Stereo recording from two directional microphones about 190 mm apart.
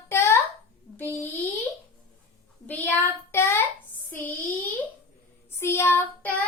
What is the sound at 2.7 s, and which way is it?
Child singing, 10° left (ahead or behind).